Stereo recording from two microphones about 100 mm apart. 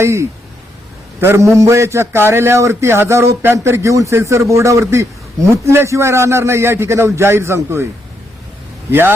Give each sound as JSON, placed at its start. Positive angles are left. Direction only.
{"t": 0.0, "sound": "a man's voice", "side_deg": -25}
{"t": 8.9, "sound": "a man's voice", "side_deg": -20}